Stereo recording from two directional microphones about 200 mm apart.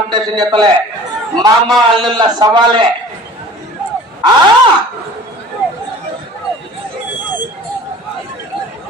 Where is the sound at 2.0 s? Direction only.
20° right (ahead or behind).